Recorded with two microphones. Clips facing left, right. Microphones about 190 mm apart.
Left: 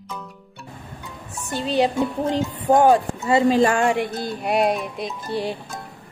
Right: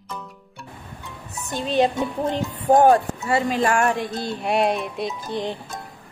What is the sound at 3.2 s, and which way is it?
Speech, 25° left (ahead or behind).